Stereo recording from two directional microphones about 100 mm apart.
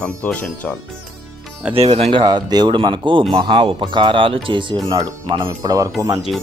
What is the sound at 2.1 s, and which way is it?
Speech, 45° right (ahead or behind).